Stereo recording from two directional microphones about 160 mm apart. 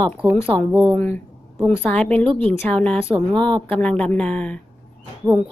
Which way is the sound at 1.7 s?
10° left (ahead or behind).